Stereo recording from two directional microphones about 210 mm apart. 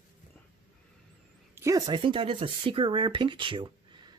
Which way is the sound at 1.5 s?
15° right (ahead or behind).